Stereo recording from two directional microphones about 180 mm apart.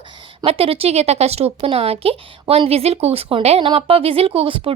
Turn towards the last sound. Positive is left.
turn(degrees=-30)  # may be behind; listen again after turning